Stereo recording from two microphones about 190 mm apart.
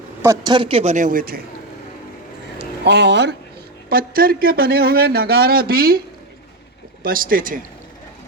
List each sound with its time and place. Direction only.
0.2 s a man's voice: 20° right (ahead or behind); by 1.4 s 50° right (ahead or behind)
2.6 s speech: 65° right (ahead or behind)
3.8 s speech: 50° right (ahead or behind)
7.0 s speech: 50° right (ahead or behind)